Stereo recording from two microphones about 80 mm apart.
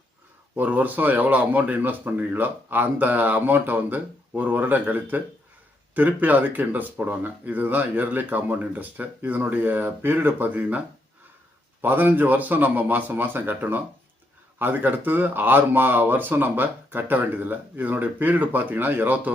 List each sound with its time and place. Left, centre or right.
0.5 s speech: right